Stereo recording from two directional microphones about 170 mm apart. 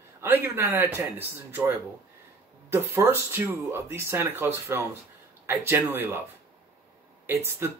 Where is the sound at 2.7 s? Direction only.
15° right (ahead or behind).